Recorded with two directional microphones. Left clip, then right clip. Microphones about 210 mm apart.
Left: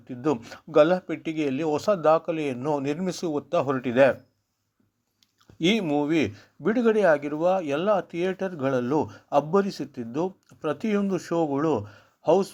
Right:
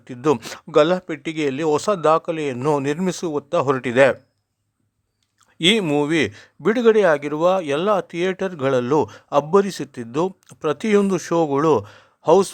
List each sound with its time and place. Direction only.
0.0 s speech: 30° right (ahead or behind)
5.5 s speech: 30° right (ahead or behind)